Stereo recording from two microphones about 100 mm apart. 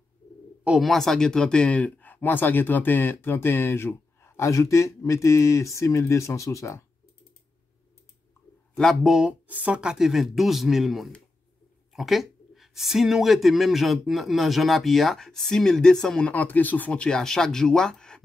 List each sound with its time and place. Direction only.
0.7 s speech: centre (ahead or behind); by 6.9 s 30° left (ahead or behind)
8.7 s speech: centre (ahead or behind)
9.5 s speech: 15° right (ahead or behind); by 18.2 s 5° left (ahead or behind)